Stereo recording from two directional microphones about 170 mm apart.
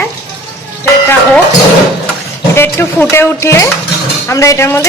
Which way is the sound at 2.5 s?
15° left (ahead or behind).